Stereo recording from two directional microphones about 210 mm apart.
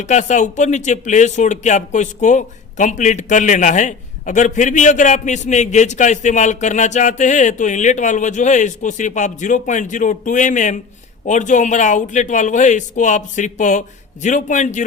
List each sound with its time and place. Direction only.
0.0 s speech: 35° left (ahead or behind)